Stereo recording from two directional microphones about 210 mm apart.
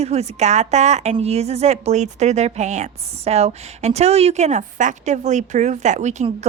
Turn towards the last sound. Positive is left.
turn(degrees=-35)  # may be behind; listen again after turning